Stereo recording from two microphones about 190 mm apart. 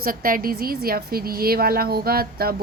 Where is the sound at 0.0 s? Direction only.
50° right (ahead or behind).